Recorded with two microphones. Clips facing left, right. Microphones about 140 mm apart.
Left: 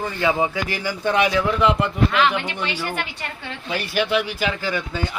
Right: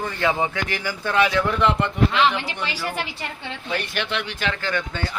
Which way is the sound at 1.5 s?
5° left (ahead or behind).